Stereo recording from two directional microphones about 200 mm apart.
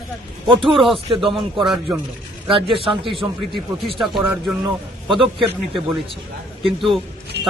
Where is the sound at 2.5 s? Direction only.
25° right (ahead or behind).